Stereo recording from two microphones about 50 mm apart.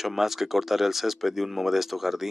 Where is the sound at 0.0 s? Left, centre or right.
Centre.